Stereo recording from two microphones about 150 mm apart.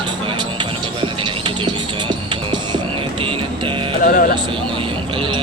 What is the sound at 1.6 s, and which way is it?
Music, 30° right (ahead or behind).